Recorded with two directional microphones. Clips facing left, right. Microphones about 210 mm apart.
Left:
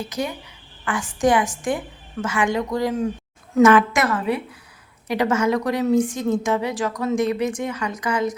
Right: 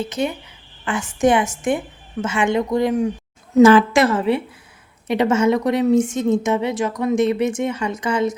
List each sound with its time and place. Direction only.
0.0 s a woman's voice: 25° right (ahead or behind)
3.5 s a woman's voice: 30° right (ahead or behind)